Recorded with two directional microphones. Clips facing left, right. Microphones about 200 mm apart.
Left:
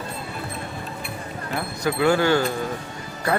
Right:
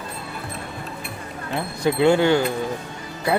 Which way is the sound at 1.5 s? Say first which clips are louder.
Right 3 dB; 25° right (ahead or behind).